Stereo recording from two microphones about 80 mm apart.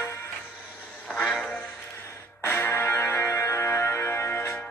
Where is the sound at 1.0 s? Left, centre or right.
Centre.